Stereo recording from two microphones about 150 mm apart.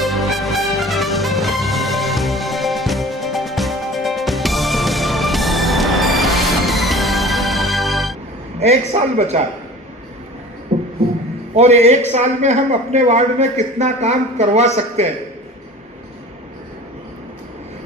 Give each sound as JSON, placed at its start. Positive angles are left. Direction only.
{"t": 0.0, "sound": "music", "side_deg": 0}
{"t": 8.5, "sound": "a man's voice", "side_deg": -45}
{"t": 10.7, "sound": "music", "side_deg": -50}
{"t": 11.5, "sound": "a man's voice", "side_deg": -45}